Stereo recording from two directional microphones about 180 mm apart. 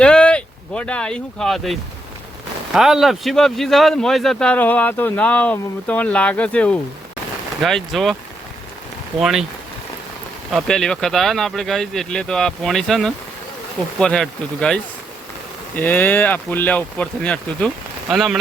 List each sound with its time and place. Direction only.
0.0 s speech: 5° left (ahead or behind)
9.2 s speech: centre (ahead or behind)
10.5 s speech: 5° left (ahead or behind)